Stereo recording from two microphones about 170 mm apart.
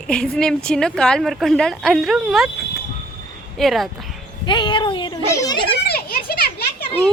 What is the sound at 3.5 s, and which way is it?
Speech, centre (ahead or behind).